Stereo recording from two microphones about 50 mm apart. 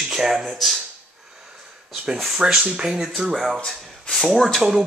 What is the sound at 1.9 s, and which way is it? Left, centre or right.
Speech, centre.